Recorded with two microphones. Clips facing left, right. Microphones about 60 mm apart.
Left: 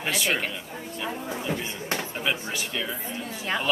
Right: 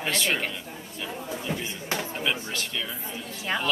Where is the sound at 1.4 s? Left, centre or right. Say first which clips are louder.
Left 2 dB; centre.